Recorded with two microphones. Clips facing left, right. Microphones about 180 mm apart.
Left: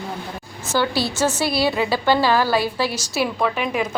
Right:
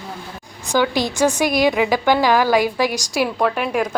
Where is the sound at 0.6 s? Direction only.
15° right (ahead or behind).